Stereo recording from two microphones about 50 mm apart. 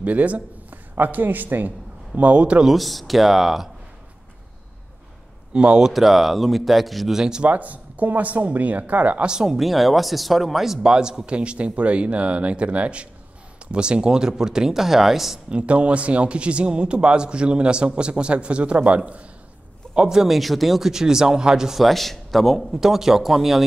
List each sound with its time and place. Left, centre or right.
0.0 s speech: right
0.9 s speech: right
2.1 s speech: right
2.6 s speech: centre
5.5 s speech: right
5.9 s speech: centre
7.2 s speech: centre
7.4 s speech: right
9.3 s speech: centre
9.6 s speech: centre
15.5 s speech: right
19.9 s speech: centre
22.8 s speech: centre